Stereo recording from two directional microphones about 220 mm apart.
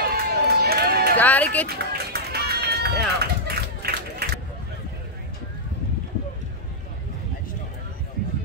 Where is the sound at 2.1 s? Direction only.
45° right (ahead or behind).